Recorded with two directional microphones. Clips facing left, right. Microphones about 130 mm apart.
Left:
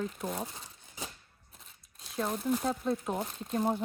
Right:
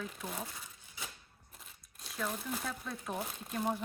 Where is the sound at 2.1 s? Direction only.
35° left (ahead or behind).